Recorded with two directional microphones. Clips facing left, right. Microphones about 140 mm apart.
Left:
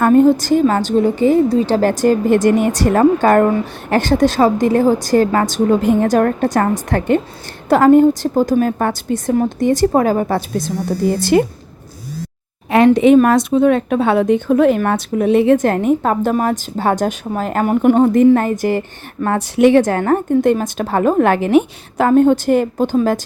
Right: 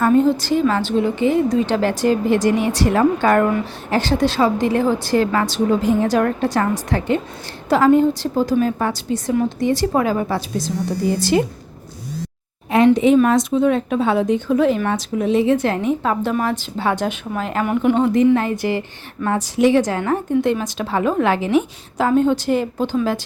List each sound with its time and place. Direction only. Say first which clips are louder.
0.0 s a woman's voice: left 4 dB; 50° left (ahead or behind)
3.8 s a woman's voice: left 5 dB; 55° left (ahead or behind)
5.8 s a woman's voice: left 3 dB; 55° left (ahead or behind)
12.7 s a woman's voice: left 4 dB; 65° left (ahead or behind); by 18.8 s 45° left (ahead or behind)
19.2 s a woman's voice: left 4 dB; 60° left (ahead or behind)